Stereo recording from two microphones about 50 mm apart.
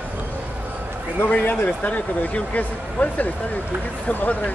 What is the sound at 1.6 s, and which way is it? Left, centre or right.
Speech, left.